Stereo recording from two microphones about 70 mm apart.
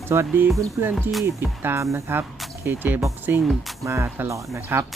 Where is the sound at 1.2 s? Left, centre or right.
Right.